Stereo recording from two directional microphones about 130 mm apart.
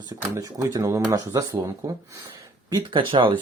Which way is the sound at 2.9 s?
40° right (ahead or behind).